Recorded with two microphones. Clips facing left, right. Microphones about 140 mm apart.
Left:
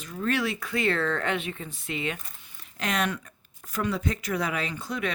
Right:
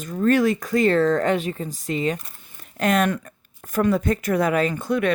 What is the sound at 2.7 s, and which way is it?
Speech, 50° right (ahead or behind).